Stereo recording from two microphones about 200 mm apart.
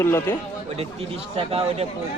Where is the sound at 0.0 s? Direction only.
10° left (ahead or behind).